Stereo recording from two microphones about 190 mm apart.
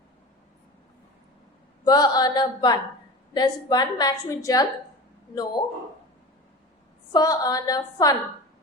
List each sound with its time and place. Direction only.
1.8 s a woman's voice: 20° left (ahead or behind)
7.1 s a woman's voice: 20° left (ahead or behind)